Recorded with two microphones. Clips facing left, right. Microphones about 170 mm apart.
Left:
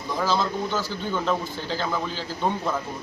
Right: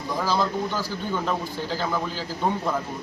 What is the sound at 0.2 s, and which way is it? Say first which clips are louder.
Speech: even; 5° right (ahead or behind).